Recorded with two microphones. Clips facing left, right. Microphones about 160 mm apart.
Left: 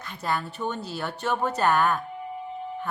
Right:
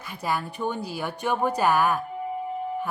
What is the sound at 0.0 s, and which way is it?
Music, 10° right (ahead or behind).